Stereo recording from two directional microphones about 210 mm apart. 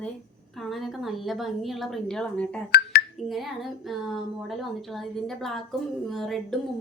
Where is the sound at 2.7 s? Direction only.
45° left (ahead or behind).